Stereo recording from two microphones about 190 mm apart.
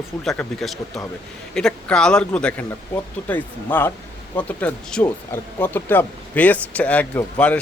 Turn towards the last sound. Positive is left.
turn(degrees=5)  # may be behind; listen again after turning